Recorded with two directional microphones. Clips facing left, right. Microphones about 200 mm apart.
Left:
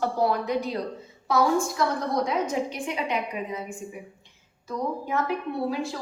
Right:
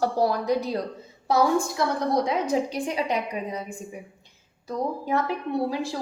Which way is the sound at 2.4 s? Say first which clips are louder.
Right 3 dB; 35° right (ahead or behind).